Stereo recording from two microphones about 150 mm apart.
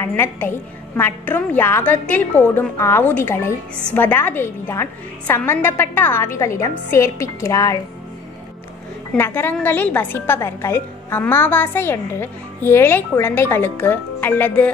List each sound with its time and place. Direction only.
0.0 s a woman's voice: 15° left (ahead or behind)
9.1 s a woman's voice: 15° left (ahead or behind)